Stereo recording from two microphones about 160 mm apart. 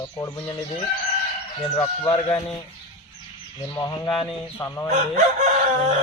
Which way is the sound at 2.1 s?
25° left (ahead or behind).